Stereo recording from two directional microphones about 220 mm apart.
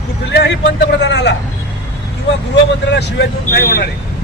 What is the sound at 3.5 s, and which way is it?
Speech, 40° left (ahead or behind).